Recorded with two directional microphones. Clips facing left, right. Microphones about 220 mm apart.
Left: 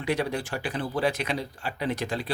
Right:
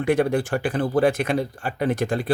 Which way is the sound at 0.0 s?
50° right (ahead or behind).